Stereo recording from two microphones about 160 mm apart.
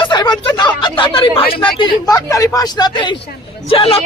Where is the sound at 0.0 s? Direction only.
25° left (ahead or behind).